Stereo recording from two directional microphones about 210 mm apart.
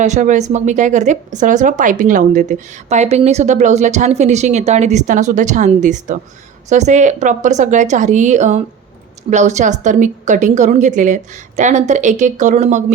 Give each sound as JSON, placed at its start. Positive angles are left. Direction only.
{"t": 0.0, "sound": "a woman's voice", "side_deg": -35}